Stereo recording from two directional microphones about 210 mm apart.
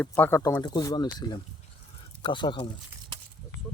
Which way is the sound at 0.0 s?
10° left (ahead or behind).